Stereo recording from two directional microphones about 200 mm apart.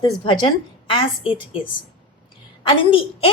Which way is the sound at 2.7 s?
25° left (ahead or behind).